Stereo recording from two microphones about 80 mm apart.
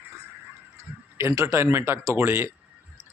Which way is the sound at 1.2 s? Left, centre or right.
Right.